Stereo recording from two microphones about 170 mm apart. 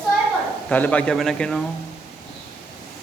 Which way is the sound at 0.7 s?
10° left (ahead or behind).